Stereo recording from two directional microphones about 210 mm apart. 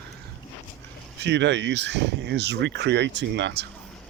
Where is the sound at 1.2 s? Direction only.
55° right (ahead or behind).